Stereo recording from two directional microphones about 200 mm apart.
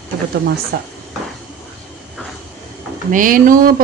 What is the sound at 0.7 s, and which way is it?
Speech, 50° right (ahead or behind).